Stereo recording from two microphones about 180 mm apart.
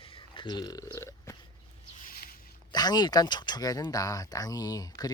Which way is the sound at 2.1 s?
55° left (ahead or behind).